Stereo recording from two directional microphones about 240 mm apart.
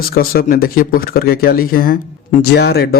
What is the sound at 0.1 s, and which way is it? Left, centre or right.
A man's voice, left.